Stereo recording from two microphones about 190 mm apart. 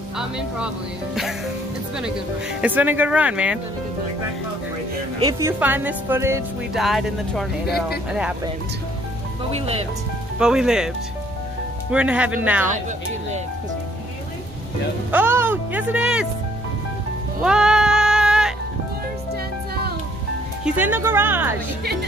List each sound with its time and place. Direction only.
2.6 s speech: 10° right (ahead or behind)
5.2 s speech: 15° right (ahead or behind)
6.7 s speech: centre (ahead or behind)
7.6 s speech: 55° left (ahead or behind)
8.1 s speech: 5° right (ahead or behind)
10.4 s speech: 5° right (ahead or behind)
11.9 s speech: 5° right (ahead or behind)
15.0 s speech: 10° right (ahead or behind)
17.4 s music: 5° right (ahead or behind)
20.6 s speech: 10° right (ahead or behind)